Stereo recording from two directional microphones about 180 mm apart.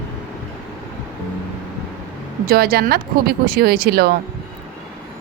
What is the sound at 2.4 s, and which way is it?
A woman's voice, 60° right (ahead or behind).